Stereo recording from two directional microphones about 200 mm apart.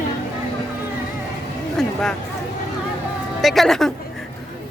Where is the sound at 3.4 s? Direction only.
Centre (ahead or behind).